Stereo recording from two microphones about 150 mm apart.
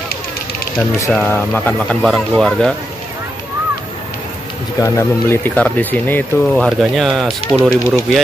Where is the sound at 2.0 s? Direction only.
Centre (ahead or behind).